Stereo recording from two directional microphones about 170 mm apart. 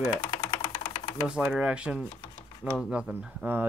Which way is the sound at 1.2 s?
5° right (ahead or behind).